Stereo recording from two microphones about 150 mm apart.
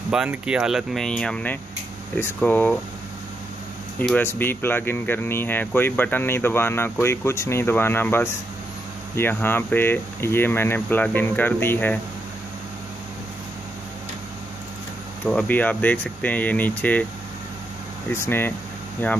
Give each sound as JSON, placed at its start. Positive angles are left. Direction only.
{"t": 0.1, "sound": "speech", "side_deg": -5}
{"t": 4.0, "sound": "speech", "side_deg": 10}
{"t": 15.2, "sound": "speech", "side_deg": 10}
{"t": 18.1, "sound": "speech", "side_deg": 15}